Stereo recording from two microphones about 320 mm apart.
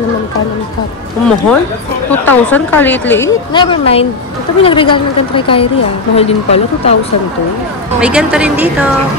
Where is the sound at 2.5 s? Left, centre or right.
Centre.